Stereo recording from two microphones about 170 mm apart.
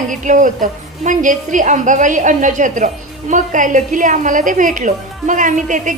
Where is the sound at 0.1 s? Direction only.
50° right (ahead or behind).